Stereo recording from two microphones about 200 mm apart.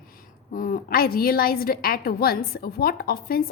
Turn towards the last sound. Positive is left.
turn(degrees=50)  # may be behind; listen again after turning